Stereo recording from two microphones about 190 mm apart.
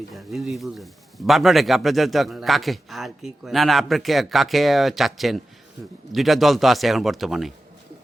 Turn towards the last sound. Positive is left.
turn(degrees=0)  # may be behind; listen again after turning